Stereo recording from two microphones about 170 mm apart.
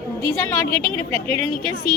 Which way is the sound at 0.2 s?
20° left (ahead or behind).